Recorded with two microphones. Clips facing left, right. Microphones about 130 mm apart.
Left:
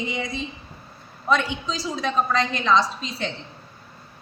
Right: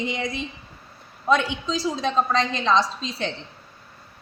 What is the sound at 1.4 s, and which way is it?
A woman's voice, 20° right (ahead or behind).